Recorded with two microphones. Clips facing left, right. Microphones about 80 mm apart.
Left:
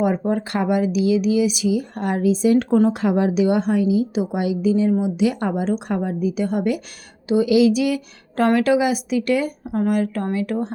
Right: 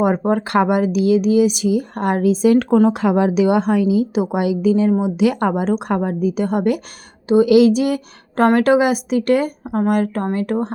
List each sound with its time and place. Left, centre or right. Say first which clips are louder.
0.0 s speech: right 3 dB; right
5.2 s a woman's voice: right 4 dB; right